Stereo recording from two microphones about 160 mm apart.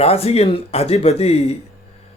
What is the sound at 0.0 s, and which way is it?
A man's voice, 40° left (ahead or behind).